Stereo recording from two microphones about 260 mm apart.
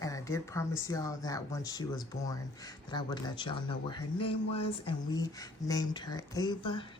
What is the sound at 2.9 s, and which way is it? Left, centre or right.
Speech, centre.